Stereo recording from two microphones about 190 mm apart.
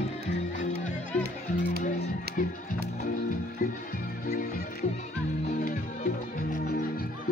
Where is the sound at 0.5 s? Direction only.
40° left (ahead or behind).